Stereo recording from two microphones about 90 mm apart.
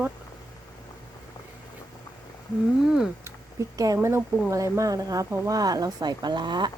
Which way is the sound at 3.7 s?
35° right (ahead or behind).